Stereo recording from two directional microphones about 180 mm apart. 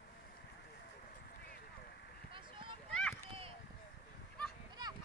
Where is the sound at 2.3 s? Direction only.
25° right (ahead or behind).